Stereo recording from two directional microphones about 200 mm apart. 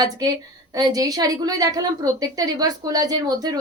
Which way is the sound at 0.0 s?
20° right (ahead or behind).